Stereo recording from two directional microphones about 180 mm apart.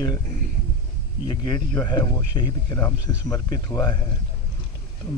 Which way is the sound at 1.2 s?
25° left (ahead or behind).